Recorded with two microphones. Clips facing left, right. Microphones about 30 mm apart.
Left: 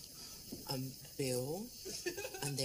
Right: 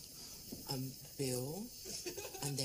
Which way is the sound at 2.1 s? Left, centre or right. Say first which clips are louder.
Left 2 dB; centre.